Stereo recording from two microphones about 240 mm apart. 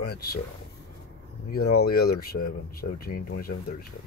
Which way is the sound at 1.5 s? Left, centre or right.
Left.